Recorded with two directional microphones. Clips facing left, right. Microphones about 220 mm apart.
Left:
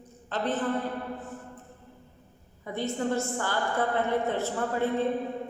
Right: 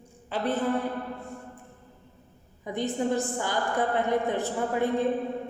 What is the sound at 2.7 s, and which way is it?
A woman's voice, 15° right (ahead or behind).